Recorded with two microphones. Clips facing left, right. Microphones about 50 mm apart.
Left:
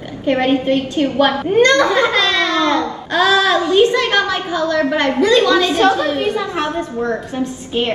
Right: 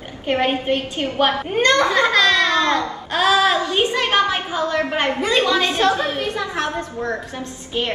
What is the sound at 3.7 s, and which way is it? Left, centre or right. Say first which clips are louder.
A woman's voice: left 5 dB; right.